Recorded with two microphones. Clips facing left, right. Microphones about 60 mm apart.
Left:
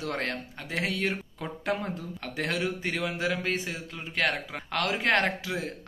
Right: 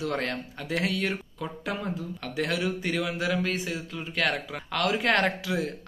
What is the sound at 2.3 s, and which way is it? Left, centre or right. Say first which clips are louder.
Speech: right 2 dB; left.